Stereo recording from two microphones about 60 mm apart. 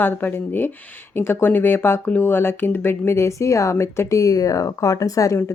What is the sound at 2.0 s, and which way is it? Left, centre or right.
Speech, left.